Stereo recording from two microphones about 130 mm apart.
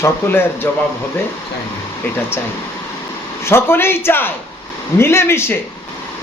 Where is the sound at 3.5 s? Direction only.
20° left (ahead or behind).